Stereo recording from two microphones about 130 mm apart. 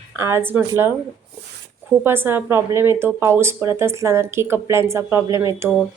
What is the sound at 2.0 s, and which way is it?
A woman's voice, 15° right (ahead or behind).